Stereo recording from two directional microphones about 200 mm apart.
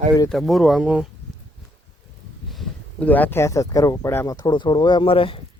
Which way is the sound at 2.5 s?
5° left (ahead or behind).